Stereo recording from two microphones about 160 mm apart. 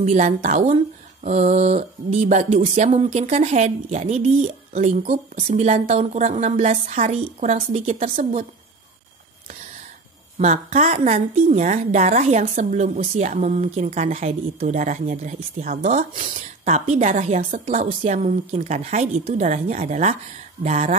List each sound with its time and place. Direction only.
0.0 s speech: 50° right (ahead or behind)
10.4 s speech: 50° right (ahead or behind)